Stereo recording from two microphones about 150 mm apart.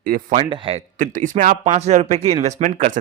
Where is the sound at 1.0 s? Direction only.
60° right (ahead or behind).